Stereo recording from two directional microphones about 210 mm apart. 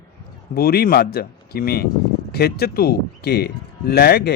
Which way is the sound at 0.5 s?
45° left (ahead or behind).